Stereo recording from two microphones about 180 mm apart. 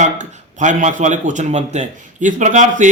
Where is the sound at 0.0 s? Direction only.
40° right (ahead or behind).